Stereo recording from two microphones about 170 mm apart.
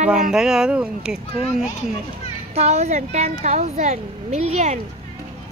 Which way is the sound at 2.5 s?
40° right (ahead or behind).